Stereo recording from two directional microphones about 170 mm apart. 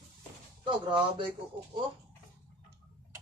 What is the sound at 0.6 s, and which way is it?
Speech, 30° right (ahead or behind).